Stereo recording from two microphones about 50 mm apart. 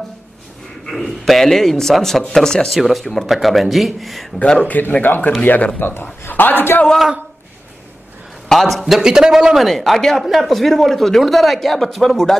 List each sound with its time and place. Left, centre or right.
0.8 s a man's voice: centre
2.7 s speech: centre
4.4 s a man's voice: left
4.6 s a man's voice: left
8.5 s speech: centre
9.7 s speech: centre